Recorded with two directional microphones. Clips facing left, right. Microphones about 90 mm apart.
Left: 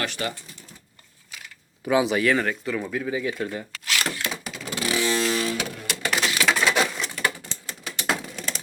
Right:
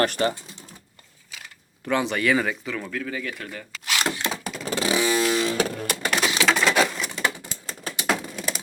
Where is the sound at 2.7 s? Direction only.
15° left (ahead or behind).